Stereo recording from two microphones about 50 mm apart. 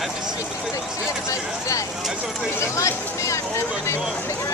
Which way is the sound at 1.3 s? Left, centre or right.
Left.